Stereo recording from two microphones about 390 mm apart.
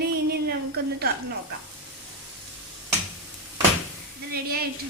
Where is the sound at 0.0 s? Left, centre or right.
Right.